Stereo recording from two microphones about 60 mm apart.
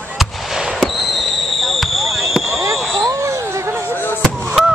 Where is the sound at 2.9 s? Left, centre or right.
Right.